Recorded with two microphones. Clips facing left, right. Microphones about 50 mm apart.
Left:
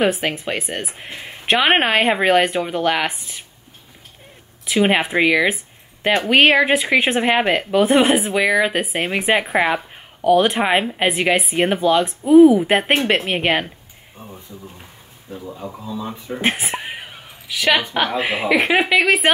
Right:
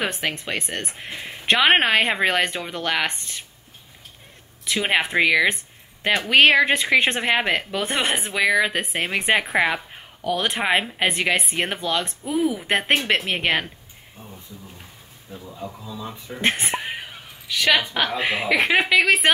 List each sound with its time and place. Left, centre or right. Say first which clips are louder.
0.0 s speech: left 7 dB; centre
4.6 s speech: left 5 dB; centre
14.1 s speech: left 4 dB; left
16.3 s a sound: left 1 dB; centre
17.9 s speech: left 3 dB; centre